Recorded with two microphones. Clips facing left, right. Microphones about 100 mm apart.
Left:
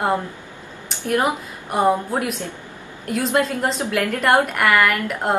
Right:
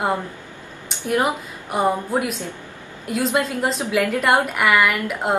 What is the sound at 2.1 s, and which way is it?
A woman's voice, centre (ahead or behind).